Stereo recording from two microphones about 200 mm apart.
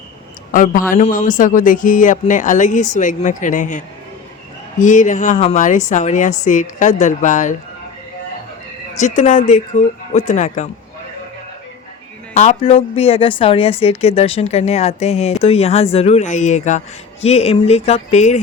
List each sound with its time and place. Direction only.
0.5 s a man's voice: 40° left (ahead or behind)
9.0 s a woman's voice: 35° left (ahead or behind)
12.3 s a woman's voice: 35° left (ahead or behind)